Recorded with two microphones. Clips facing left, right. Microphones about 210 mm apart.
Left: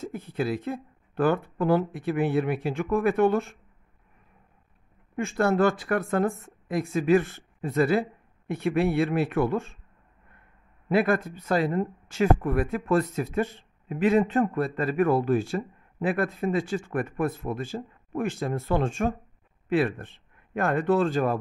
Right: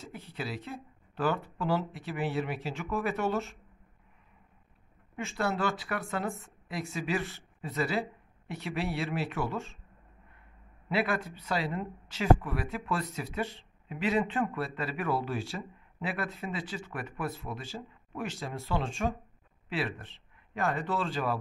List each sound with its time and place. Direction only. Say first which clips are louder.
0.0 s speech: left 10 dB; 50° left (ahead or behind)
5.1 s speech: left 8 dB; 50° left (ahead or behind)
10.9 s speech: left 7 dB; 50° left (ahead or behind)